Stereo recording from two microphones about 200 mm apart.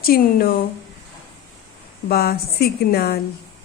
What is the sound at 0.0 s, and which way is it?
Speech, 50° left (ahead or behind).